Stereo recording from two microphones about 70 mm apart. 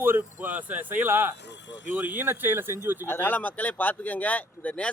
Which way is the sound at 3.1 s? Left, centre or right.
Left.